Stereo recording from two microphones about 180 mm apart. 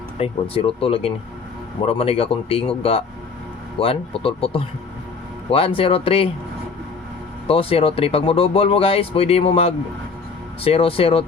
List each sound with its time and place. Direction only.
0.2 s speech: 30° left (ahead or behind)
7.4 s speech: 30° left (ahead or behind)